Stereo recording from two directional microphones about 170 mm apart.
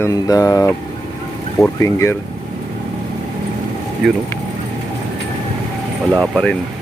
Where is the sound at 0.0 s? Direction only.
20° left (ahead or behind).